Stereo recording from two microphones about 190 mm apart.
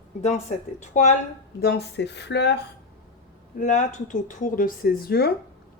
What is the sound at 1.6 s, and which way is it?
Speech, 60° left (ahead or behind).